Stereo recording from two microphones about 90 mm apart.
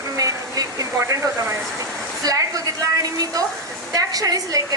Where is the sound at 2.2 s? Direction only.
40° right (ahead or behind).